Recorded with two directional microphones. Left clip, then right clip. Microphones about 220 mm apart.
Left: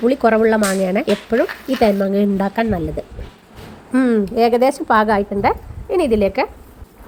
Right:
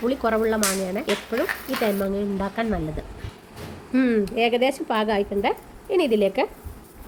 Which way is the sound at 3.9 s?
15° left (ahead or behind).